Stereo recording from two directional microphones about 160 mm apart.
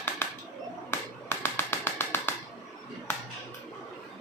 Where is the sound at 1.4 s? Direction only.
15° left (ahead or behind).